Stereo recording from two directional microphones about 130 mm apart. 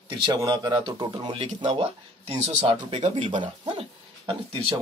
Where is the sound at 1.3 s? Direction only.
55° right (ahead or behind).